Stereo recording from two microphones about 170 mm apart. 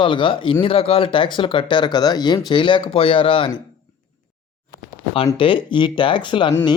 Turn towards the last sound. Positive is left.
turn(degrees=30)  # may be behind; listen again after turning